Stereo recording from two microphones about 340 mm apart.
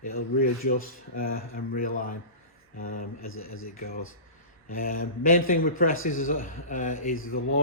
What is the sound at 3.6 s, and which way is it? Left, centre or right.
Speech, left.